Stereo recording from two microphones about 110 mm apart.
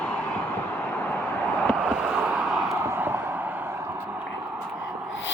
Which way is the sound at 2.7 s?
20° right (ahead or behind).